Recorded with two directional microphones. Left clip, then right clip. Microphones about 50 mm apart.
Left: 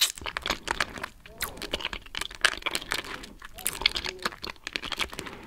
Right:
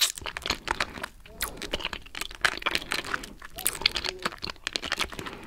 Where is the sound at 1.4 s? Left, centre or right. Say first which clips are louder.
Even; right.